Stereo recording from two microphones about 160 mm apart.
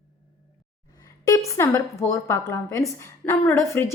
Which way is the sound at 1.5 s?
15° left (ahead or behind).